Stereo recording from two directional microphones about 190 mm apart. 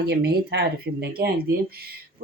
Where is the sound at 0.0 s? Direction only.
60° right (ahead or behind).